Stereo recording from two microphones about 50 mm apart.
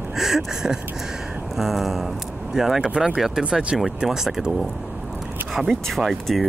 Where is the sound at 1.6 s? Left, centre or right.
Centre.